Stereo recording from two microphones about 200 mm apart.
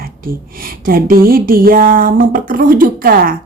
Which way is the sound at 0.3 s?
45° right (ahead or behind).